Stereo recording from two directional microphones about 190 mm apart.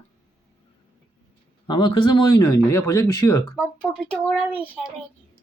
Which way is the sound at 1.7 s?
25° left (ahead or behind).